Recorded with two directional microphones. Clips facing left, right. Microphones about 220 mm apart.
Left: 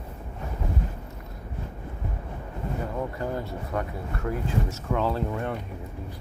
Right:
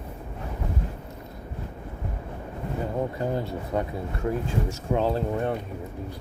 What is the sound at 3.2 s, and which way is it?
Speech, 25° right (ahead or behind).